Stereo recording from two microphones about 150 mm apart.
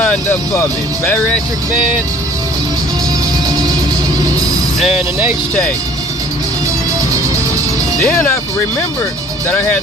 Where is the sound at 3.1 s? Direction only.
25° right (ahead or behind).